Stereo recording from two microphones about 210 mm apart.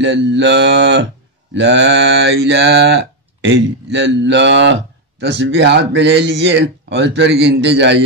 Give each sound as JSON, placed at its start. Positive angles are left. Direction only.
{"t": 0.0, "sound": "mantra", "side_deg": -55}